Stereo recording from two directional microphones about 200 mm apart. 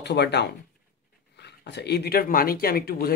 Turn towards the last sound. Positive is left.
turn(degrees=50)  # may be behind; listen again after turning